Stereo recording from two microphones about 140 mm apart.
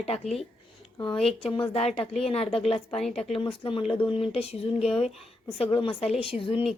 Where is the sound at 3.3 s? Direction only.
40° left (ahead or behind).